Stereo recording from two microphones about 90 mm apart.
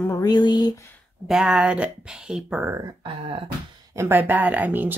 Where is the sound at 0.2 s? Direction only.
50° left (ahead or behind).